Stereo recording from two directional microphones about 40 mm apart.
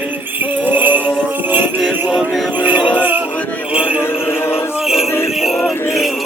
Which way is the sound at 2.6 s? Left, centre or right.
Right.